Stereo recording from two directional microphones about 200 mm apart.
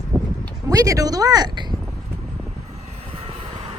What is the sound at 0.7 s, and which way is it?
Speech, 15° right (ahead or behind).